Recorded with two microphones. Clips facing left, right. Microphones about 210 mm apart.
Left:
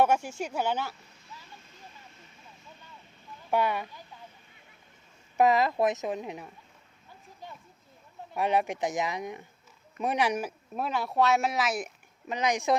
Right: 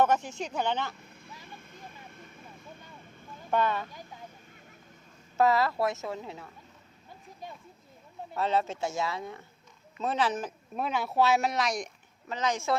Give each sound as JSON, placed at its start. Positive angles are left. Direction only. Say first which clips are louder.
{"t": 0.0, "sound": "speech", "louder": "left 1 dB", "side_deg": 10}
{"t": 1.1, "sound": "vehicle", "louder": "right 3 dB", "side_deg": -55}
{"t": 3.5, "sound": "speech", "louder": "left 1 dB", "side_deg": 10}
{"t": 5.4, "sound": "speech", "louder": "left 2 dB", "side_deg": 15}
{"t": 8.4, "sound": "speech", "louder": "left 2 dB", "side_deg": 15}
{"t": 12.3, "sound": "speech", "louder": "left 2 dB", "side_deg": 15}